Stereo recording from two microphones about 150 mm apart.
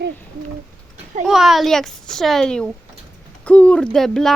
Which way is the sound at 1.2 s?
Centre (ahead or behind).